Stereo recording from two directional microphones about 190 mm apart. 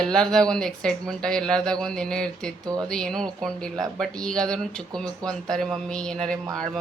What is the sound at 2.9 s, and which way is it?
Speech, 5° left (ahead or behind).